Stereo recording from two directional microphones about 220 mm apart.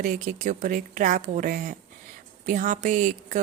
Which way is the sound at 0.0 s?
35° right (ahead or behind).